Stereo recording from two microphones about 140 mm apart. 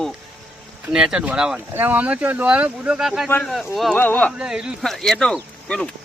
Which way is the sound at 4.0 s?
10° left (ahead or behind).